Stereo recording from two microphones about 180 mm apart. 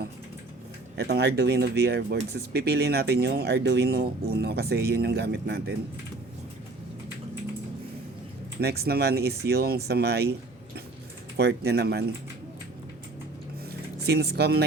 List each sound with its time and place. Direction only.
0.9 s speech: 65° right (ahead or behind)
8.6 s speech: 60° right (ahead or behind)
11.3 s speech: 65° right (ahead or behind)
13.7 s vehicle: 65° right (ahead or behind)